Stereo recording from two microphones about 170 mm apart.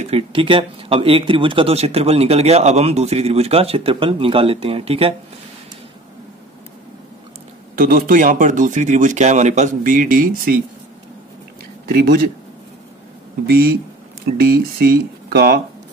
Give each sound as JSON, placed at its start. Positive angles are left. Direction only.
{"t": 0.0, "sound": "speech", "side_deg": -35}
{"t": 7.7, "sound": "speech", "side_deg": -55}
{"t": 11.9, "sound": "speech", "side_deg": -60}
{"t": 13.5, "sound": "speech", "side_deg": -60}